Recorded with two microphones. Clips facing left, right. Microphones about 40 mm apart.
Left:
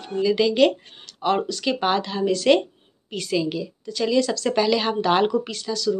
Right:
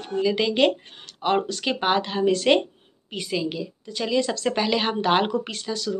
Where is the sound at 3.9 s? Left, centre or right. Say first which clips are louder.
Left 3 dB; right.